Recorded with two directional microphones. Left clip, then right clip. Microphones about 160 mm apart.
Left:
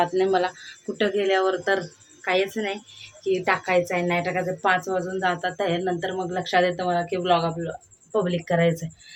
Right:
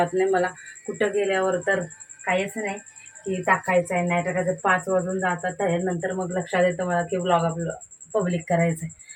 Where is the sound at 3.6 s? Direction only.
15° left (ahead or behind).